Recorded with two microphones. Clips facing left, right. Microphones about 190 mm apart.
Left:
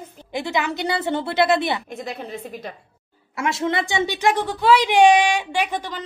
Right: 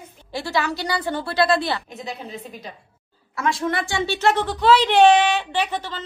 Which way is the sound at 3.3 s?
25° left (ahead or behind).